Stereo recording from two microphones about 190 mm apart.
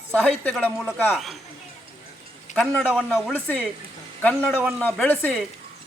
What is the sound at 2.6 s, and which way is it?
A woman's voice, 5° left (ahead or behind).